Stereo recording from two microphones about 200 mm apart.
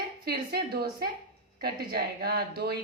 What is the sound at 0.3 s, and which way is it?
A woman's voice, 50° right (ahead or behind).